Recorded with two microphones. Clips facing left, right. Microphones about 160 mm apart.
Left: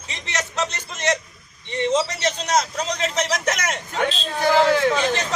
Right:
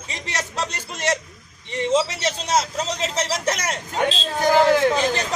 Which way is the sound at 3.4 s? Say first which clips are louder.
Even; 35° right (ahead or behind).